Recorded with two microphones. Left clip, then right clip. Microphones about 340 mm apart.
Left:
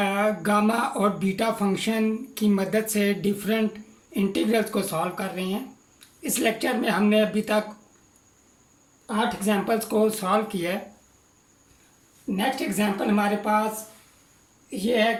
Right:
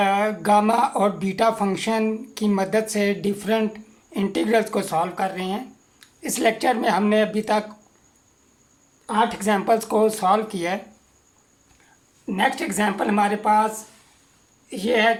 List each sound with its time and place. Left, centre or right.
0.0 s speech: centre
9.0 s speech: right
12.4 s speech: right
14.7 s speech: right